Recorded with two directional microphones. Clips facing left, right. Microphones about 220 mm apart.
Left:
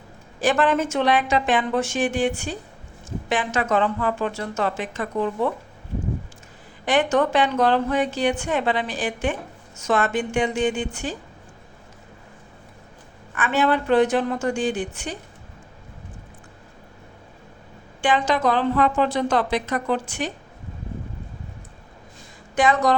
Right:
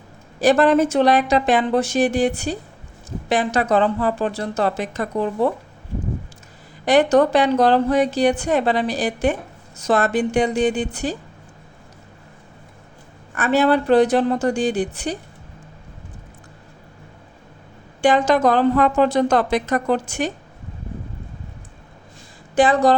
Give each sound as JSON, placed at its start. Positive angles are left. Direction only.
{"t": 0.3, "sound": "a woman's voice", "side_deg": -40}
{"t": 6.8, "sound": "a woman's voice", "side_deg": -40}
{"t": 13.3, "sound": "a woman's voice", "side_deg": -40}
{"t": 18.0, "sound": "a woman's voice", "side_deg": -45}
{"t": 22.5, "sound": "a woman's voice", "side_deg": -35}